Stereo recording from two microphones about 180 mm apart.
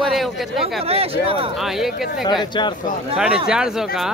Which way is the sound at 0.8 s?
35° right (ahead or behind).